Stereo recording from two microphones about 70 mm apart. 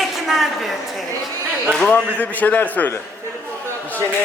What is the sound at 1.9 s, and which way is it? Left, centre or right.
A man's voice, left.